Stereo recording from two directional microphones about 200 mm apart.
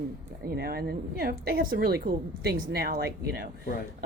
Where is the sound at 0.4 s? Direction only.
50° right (ahead or behind).